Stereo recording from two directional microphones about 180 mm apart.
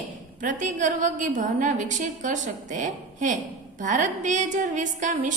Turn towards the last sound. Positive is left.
turn(degrees=-45)  # may be behind; listen again after turning